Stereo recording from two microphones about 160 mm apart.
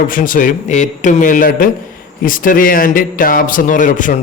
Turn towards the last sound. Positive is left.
turn(degrees=55)  # may be behind; listen again after turning